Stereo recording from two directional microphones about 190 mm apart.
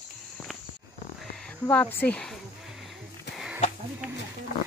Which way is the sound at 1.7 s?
10° left (ahead or behind).